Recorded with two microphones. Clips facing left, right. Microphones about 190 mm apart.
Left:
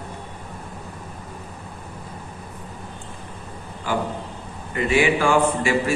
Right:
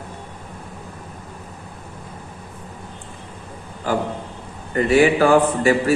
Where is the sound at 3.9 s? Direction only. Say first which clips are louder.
Right 3 dB; 40° right (ahead or behind).